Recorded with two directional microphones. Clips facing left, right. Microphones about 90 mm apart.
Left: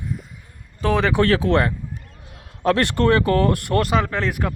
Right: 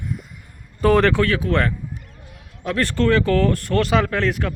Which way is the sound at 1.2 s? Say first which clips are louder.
Left 3 dB; 30° left (ahead or behind).